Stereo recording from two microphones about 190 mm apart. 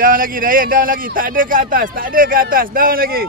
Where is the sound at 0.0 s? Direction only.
50° right (ahead or behind).